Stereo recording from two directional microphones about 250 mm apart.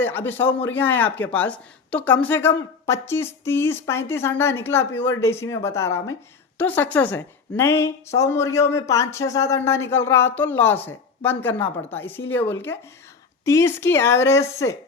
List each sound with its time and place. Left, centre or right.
0.0 s speech: centre